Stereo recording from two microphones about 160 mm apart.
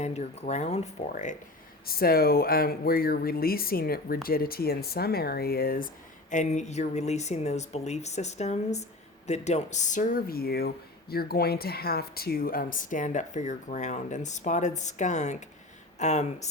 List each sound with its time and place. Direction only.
0.0 s speech: 45° left (ahead or behind)
1.9 s speech: 70° left (ahead or behind)
6.3 s speech: 50° left (ahead or behind)